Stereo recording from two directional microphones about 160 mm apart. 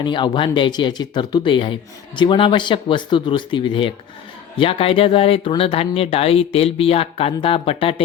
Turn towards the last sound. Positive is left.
turn(degrees=35)  # may be behind; listen again after turning